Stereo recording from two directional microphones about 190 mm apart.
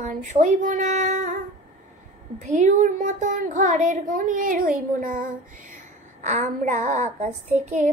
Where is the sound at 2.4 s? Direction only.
40° right (ahead or behind).